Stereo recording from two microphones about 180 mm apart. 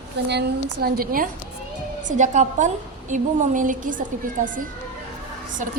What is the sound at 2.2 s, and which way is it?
A woman's voice, 40° right (ahead or behind).